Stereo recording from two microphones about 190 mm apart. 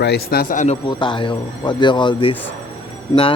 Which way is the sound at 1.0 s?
25° left (ahead or behind).